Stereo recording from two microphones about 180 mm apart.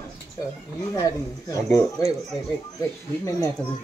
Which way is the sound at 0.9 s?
20° left (ahead or behind).